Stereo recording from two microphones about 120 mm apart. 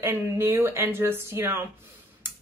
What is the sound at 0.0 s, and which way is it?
Speech, 20° right (ahead or behind).